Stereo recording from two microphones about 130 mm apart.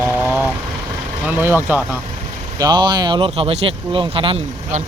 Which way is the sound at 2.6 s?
35° right (ahead or behind).